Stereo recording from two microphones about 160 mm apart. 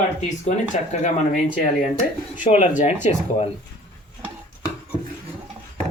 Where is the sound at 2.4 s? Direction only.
50° left (ahead or behind).